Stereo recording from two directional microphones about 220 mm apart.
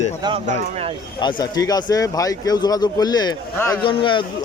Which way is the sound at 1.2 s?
20° left (ahead or behind).